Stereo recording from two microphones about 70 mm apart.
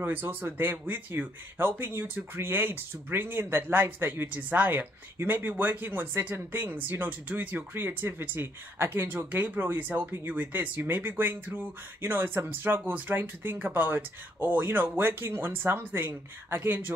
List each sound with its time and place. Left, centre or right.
0.0 s speech: right